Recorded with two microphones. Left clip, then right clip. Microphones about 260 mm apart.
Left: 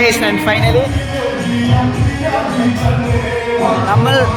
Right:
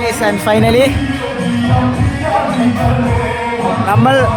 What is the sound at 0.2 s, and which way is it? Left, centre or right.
Speech, right.